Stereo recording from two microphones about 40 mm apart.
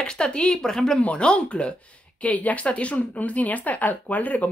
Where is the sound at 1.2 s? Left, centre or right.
Left.